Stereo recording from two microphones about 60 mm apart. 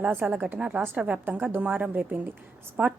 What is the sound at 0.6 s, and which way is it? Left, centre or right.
A woman's voice, centre.